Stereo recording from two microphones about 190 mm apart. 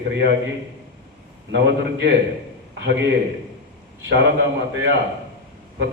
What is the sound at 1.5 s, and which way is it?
A man's voice, 70° right (ahead or behind).